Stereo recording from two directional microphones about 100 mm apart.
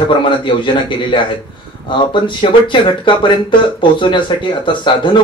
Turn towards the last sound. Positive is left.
turn(degrees=55)  # may be behind; listen again after turning